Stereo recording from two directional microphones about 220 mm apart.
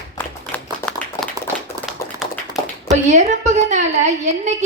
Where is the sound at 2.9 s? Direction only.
30° right (ahead or behind).